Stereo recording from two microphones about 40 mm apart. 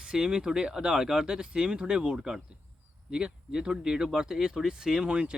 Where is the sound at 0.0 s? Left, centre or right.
Centre.